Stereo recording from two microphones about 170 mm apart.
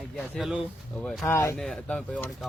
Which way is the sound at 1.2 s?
15° left (ahead or behind).